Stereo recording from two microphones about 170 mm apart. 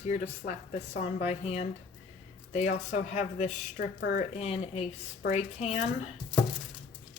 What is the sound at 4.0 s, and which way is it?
Speech, 55° left (ahead or behind).